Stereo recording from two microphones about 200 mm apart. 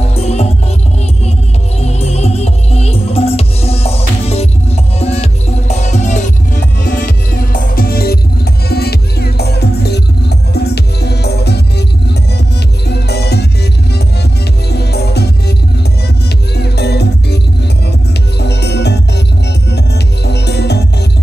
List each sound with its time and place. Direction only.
0.1 s music: 30° left (ahead or behind)
1.8 s music: 30° left (ahead or behind); by 13.5 s 55° left (ahead or behind)
14.7 s music: 55° left (ahead or behind)
16.5 s music: 55° left (ahead or behind)
18.4 s music: 55° left (ahead or behind)
20.2 s music: 55° left (ahead or behind)